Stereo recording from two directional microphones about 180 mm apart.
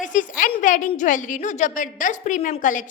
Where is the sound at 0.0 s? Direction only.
45° left (ahead or behind).